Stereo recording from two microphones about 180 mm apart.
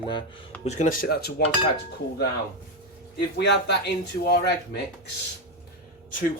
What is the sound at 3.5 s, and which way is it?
Speech, 70° left (ahead or behind).